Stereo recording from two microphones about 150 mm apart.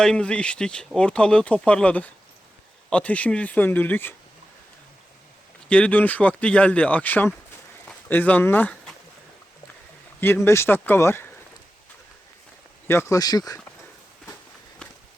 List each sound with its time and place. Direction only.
0.0 s speech: 5° left (ahead or behind)
5.6 s speech: 10° left (ahead or behind)
10.2 s speech: 15° left (ahead or behind)
12.9 s speech: 20° left (ahead or behind)
14.8 s a sound: 5° left (ahead or behind)